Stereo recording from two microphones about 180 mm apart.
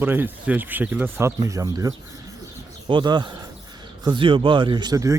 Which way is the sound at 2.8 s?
25° right (ahead or behind).